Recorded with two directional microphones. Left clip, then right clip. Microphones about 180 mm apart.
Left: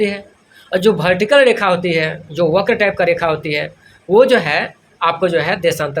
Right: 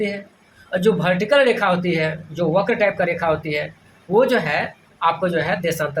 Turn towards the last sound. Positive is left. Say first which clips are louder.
# left 5 dB
turn(degrees=55)  # may be behind; listen again after turning